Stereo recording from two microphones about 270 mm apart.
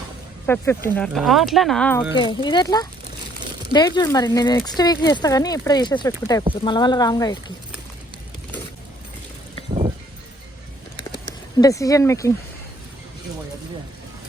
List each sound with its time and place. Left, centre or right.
0.4 s speech: centre
2.1 s speech: centre
10.9 s a sound: centre